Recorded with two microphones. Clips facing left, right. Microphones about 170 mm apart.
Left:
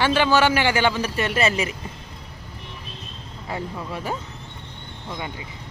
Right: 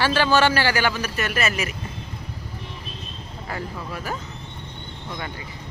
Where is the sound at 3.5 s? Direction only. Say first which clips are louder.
Left 2 dB; 25° left (ahead or behind).